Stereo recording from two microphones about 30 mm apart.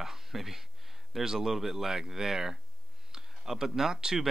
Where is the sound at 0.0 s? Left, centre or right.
Centre.